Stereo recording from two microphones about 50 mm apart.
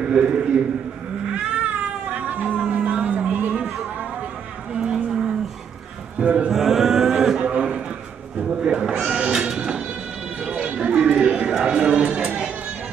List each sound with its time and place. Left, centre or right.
0.1 s a man's voice: centre
1.3 s cat: right
4.7 s a sound: centre
6.1 s chant: right
6.5 s chant: centre
7.4 s a sound: right
8.6 s bleat: centre
9.0 s sheep: centre
9.5 s a sound: centre